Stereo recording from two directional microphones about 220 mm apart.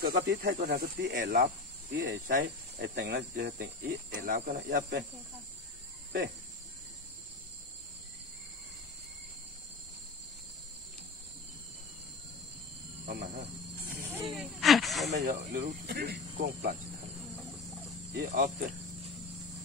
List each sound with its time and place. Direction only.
0.0 s speech: 40° right (ahead or behind)
13.0 s speech: 45° right (ahead or behind)
13.8 s a sound: 5° right (ahead or behind)
15.2 s speech: 40° right (ahead or behind)
18.2 s speech: 35° right (ahead or behind)